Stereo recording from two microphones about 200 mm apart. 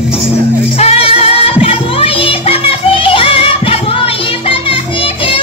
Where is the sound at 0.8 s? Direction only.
30° left (ahead or behind).